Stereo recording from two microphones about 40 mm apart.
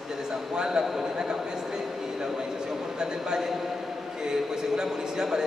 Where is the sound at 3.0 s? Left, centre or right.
Centre.